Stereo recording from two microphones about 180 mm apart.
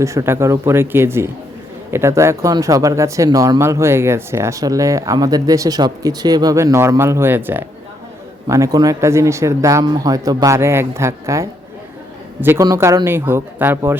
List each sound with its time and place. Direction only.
0.0 s speech: 15° right (ahead or behind)